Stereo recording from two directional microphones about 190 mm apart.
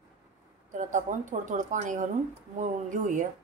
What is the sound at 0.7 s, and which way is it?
A woman's voice, 40° right (ahead or behind).